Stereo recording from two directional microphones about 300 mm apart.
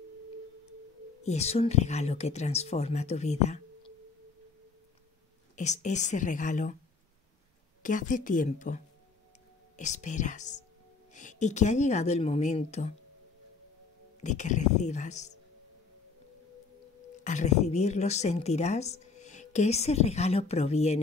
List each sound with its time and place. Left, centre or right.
1.2 s speech: left
5.6 s speech: left
7.8 s speech: left
14.2 s speech: left
17.2 s speech: left